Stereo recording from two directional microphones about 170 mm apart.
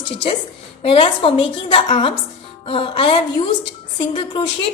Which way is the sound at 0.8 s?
30° left (ahead or behind).